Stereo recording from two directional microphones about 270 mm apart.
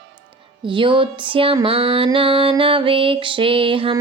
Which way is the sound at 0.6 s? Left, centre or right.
Centre.